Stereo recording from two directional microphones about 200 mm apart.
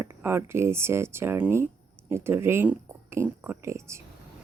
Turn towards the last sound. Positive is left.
turn(degrees=-15)  # may be behind; listen again after turning